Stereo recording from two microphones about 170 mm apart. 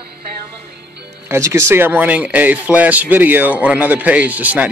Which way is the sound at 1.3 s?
15° right (ahead or behind).